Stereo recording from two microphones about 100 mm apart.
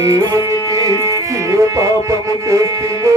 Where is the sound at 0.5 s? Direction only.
35° left (ahead or behind).